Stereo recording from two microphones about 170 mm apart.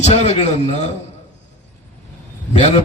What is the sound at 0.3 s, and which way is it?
Speech, 40° left (ahead or behind).